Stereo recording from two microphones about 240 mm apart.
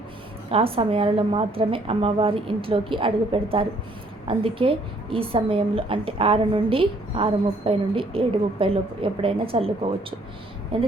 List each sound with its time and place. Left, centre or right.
0.5 s a woman's voice: right